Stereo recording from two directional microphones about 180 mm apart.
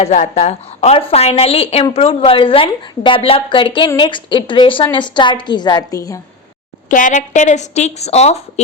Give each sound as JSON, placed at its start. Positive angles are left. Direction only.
{"t": 0.0, "sound": "a woman's voice", "side_deg": 40}
{"t": 6.8, "sound": "a woman's voice", "side_deg": 45}